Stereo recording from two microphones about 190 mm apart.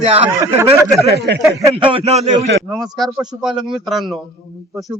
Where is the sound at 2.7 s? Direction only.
Centre (ahead or behind).